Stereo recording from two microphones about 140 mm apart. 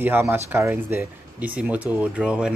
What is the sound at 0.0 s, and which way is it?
Speech, 15° right (ahead or behind).